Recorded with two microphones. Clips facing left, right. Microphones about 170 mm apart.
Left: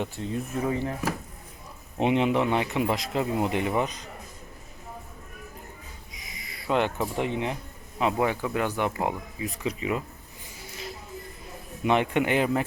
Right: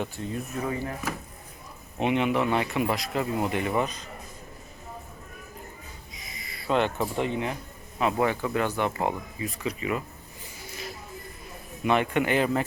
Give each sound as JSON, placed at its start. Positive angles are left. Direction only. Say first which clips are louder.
{"t": 0.0, "sound": "speech", "louder": "left 1 dB", "side_deg": 25}
{"t": 2.0, "sound": "speech", "louder": "left 1 dB", "side_deg": 25}
{"t": 6.1, "sound": "a sound", "louder": "right 1 dB", "side_deg": 15}
{"t": 7.9, "sound": "speech", "louder": "even", "side_deg": 15}
{"t": 11.9, "sound": "speech", "louder": "left 1 dB", "side_deg": 20}